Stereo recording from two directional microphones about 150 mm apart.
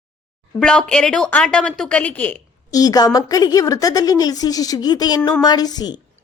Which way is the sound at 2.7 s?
25° left (ahead or behind).